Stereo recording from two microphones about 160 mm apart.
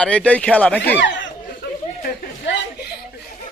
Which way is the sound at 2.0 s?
80° left.